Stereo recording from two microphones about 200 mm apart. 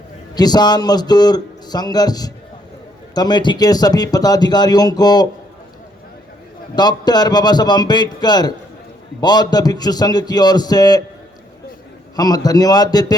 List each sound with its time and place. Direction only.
0.3 s speech: 20° left (ahead or behind)
6.7 s speech: 20° left (ahead or behind)
12.1 s speech: 20° left (ahead or behind)